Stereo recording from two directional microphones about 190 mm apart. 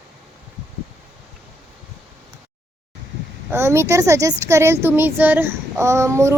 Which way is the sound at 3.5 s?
15° right (ahead or behind).